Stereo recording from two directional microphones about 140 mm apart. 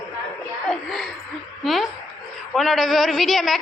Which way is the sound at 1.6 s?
Centre (ahead or behind).